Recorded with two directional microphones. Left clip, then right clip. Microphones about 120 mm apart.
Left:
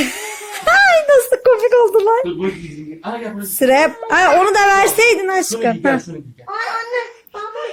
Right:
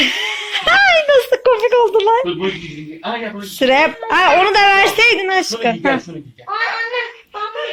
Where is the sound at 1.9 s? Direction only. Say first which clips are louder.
Even; 35° left (ahead or behind).